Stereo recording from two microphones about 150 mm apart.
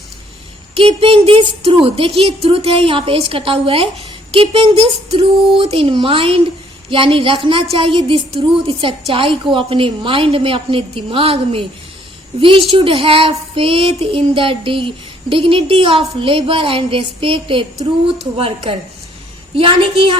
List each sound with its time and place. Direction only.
0.7 s child singing: 40° right (ahead or behind)